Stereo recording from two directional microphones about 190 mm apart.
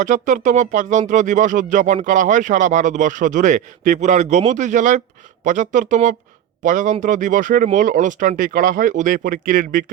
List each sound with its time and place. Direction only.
0.0 s speech: 40° right (ahead or behind)